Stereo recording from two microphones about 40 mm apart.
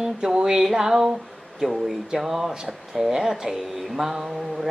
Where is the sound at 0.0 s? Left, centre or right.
Centre.